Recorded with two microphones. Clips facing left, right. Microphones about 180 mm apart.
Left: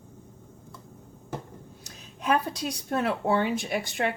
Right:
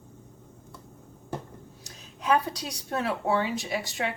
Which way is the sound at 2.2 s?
55° left (ahead or behind).